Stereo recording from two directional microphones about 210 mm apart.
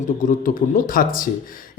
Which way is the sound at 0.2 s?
40° left (ahead or behind).